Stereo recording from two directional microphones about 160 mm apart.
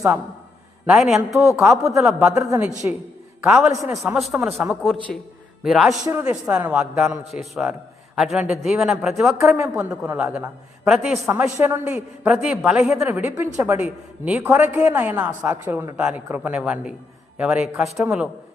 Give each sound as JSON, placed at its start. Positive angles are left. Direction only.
{"t": 0.9, "sound": "speech", "side_deg": -5}
{"t": 2.8, "sound": "a man's voice", "side_deg": -15}
{"t": 6.1, "sound": "a man's voice", "side_deg": -20}
{"t": 6.4, "sound": "a man's voice", "side_deg": -5}